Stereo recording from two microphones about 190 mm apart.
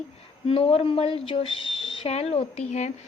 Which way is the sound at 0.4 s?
30° left (ahead or behind).